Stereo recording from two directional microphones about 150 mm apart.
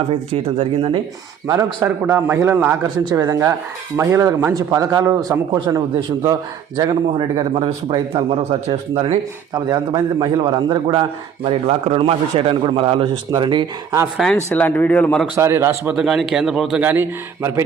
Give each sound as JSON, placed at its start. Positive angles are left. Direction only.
{"t": 0.6, "sound": "speech", "side_deg": -35}
{"t": 1.5, "sound": "a man's voice", "side_deg": -20}
{"t": 3.1, "sound": "speech", "side_deg": -25}
{"t": 9.6, "sound": "speech", "side_deg": -25}
{"t": 11.4, "sound": "speech", "side_deg": -40}
{"t": 14.2, "sound": "speech", "side_deg": 5}
{"t": 15.4, "sound": "a man's voice", "side_deg": -15}
{"t": 16.0, "sound": "a man's voice", "side_deg": 0}